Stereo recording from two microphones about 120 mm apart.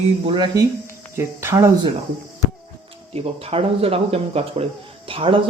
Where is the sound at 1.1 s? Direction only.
20° right (ahead or behind).